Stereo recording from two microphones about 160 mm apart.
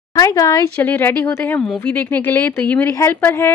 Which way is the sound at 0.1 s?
25° left (ahead or behind).